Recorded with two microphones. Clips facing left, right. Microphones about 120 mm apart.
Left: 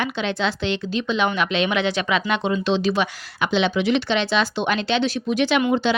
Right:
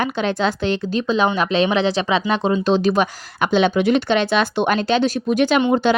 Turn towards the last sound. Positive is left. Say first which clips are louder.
# right 3 dB
turn(degrees=-50)  # may be behind; listen again after turning